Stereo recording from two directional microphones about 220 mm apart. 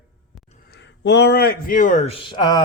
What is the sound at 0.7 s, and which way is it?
Speech, 55° left (ahead or behind).